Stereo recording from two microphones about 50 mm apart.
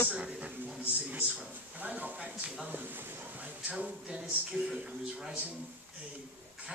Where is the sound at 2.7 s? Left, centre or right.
Right.